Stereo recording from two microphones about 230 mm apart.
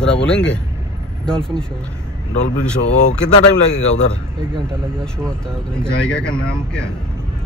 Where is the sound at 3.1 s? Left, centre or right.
Left.